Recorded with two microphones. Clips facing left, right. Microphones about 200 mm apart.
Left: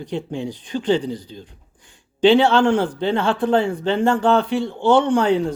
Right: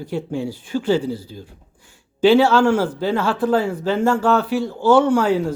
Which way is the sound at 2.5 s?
5° right (ahead or behind).